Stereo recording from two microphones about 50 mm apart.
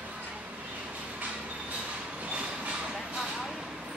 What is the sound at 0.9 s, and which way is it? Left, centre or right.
Train, right.